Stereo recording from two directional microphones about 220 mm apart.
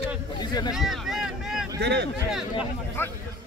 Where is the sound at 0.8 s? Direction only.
Centre (ahead or behind).